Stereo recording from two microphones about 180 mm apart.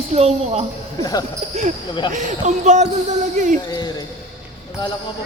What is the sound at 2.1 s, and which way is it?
Speech, 40° right (ahead or behind).